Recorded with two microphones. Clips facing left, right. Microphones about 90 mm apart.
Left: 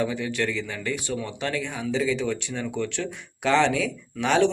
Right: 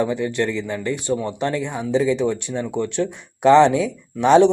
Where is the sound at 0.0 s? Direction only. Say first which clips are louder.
Right 5 dB; 25° right (ahead or behind).